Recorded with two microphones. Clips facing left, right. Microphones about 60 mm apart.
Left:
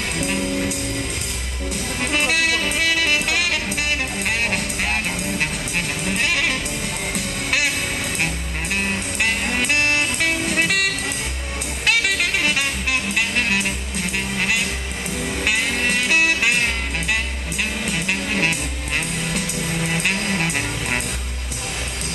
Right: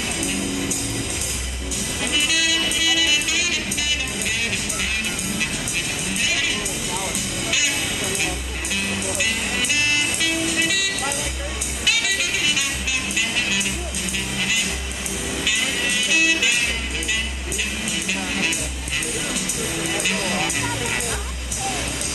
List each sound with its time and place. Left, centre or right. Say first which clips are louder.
0.2 s music: left 4 dB; left
2.1 s music: left 2 dB; left
6.0 s music: left 3 dB; left
8.7 s music: left 1 dB; left
17.8 s music: left 2 dB; left